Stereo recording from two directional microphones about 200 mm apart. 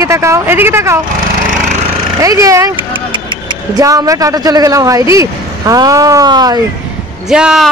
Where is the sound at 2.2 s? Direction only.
15° right (ahead or behind).